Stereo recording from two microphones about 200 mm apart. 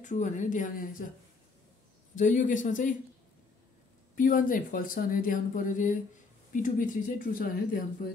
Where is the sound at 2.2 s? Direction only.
40° left (ahead or behind).